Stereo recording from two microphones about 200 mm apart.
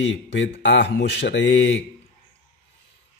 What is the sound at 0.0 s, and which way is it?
Speech, 65° left (ahead or behind).